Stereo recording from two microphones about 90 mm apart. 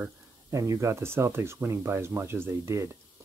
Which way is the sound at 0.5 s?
35° right (ahead or behind).